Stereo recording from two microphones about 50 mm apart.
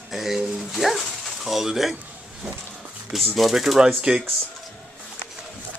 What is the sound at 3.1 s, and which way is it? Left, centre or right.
Speech, centre.